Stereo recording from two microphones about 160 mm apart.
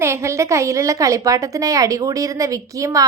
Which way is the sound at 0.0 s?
15° right (ahead or behind).